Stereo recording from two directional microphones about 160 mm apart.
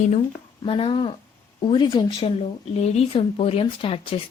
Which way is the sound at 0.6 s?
35° left (ahead or behind).